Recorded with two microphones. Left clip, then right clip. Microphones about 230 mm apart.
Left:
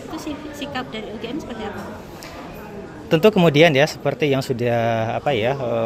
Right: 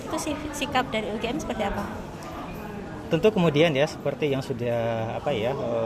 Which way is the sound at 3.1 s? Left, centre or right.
Left.